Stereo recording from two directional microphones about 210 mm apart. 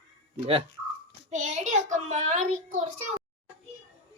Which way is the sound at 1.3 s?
35° right (ahead or behind).